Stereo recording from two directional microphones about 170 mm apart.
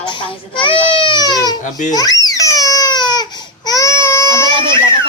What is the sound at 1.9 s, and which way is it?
Baby cry, 20° left (ahead or behind).